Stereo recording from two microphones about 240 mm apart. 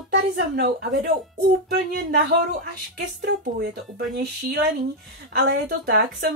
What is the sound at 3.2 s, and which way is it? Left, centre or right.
A woman's voice, right.